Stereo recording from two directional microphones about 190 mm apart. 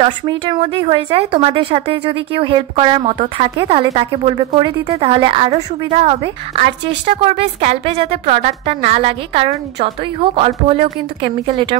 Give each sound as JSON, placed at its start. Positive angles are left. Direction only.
{"t": 0.0, "sound": "a woman's voice", "side_deg": -25}